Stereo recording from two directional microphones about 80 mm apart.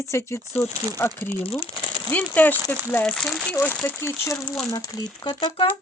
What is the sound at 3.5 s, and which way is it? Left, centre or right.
Speech, left.